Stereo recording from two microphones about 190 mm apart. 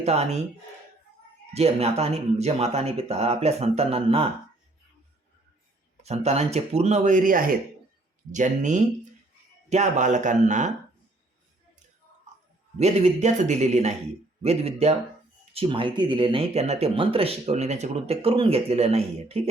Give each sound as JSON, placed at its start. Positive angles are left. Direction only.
{"t": 0.0, "sound": "speech", "side_deg": -35}
{"t": 1.5, "sound": "speech", "side_deg": -35}
{"t": 6.0, "sound": "speech", "side_deg": -35}
{"t": 12.8, "sound": "speech", "side_deg": -35}